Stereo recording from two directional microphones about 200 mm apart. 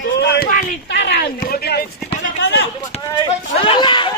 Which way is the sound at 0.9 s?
55° left (ahead or behind).